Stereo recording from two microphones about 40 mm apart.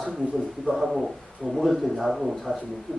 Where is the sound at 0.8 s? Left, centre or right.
Centre.